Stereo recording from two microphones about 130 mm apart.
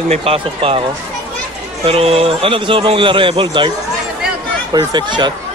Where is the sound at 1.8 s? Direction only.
50° right (ahead or behind).